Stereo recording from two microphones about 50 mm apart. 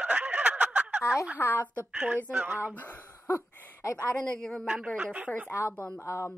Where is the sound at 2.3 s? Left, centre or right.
Right.